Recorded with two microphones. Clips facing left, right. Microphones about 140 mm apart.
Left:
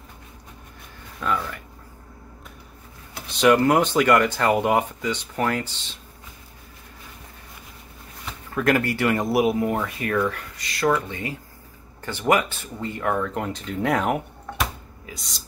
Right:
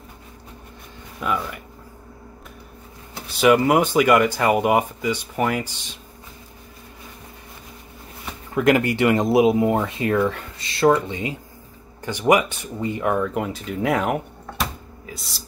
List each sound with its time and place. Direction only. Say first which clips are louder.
1.2 s speech: right 1 dB; 15° right (ahead or behind)
3.3 s speech: right 1 dB; 5° right (ahead or behind)
8.3 s speech: right 4 dB; 20° right (ahead or behind); by 14.2 s centre (ahead or behind)
15.0 s a sound: right 2 dB; centre (ahead or behind)